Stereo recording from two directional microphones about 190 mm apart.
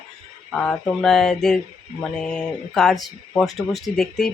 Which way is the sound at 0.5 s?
5° left (ahead or behind).